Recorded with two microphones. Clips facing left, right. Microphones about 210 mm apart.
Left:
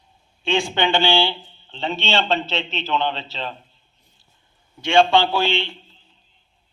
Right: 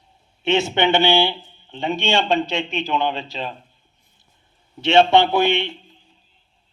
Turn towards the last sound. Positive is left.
turn(degrees=-20)  # may be behind; listen again after turning